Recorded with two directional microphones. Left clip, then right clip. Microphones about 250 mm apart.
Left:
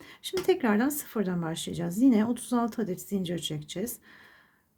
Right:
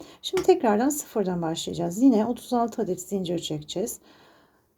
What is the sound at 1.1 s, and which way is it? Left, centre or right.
Speech, left.